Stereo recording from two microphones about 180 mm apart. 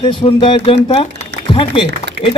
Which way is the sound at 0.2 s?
30° left (ahead or behind).